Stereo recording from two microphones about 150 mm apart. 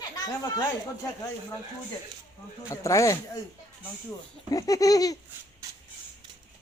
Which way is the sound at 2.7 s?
20° left (ahead or behind).